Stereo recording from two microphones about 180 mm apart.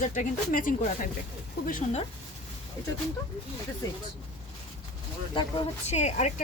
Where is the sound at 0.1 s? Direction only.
50° left (ahead or behind).